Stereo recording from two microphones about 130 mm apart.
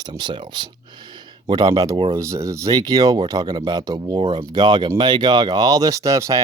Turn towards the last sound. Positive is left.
turn(degrees=-25)  # may be behind; listen again after turning